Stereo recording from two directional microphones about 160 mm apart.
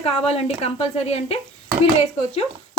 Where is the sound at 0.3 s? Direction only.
40° left (ahead or behind).